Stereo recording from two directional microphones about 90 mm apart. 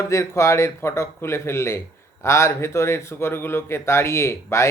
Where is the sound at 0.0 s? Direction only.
30° left (ahead or behind).